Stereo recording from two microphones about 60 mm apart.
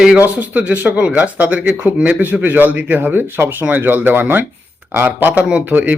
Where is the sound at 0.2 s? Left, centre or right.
Right.